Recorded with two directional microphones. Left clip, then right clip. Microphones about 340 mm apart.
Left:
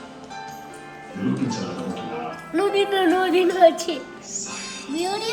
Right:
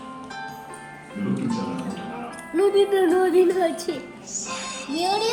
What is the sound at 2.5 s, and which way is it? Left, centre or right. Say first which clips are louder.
Speech: right 2 dB; left.